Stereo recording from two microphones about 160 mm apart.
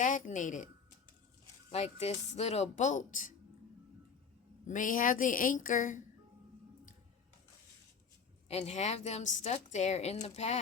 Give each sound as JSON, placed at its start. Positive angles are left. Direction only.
{"t": 0.0, "sound": "a woman's voice", "side_deg": 50}
{"t": 1.7, "sound": "a woman's voice", "side_deg": 40}
{"t": 4.6, "sound": "a woman's voice", "side_deg": 55}
{"t": 8.4, "sound": "a woman's voice", "side_deg": 40}